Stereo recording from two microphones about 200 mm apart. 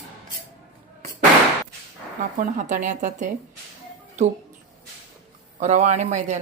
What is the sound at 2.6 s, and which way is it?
Speech, 40° right (ahead or behind).